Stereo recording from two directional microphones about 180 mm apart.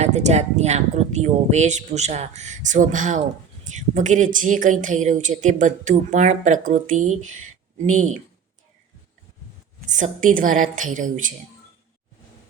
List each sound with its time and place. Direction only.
0.0 s a woman's voice: 40° right (ahead or behind)
9.8 s a woman's voice: 45° right (ahead or behind)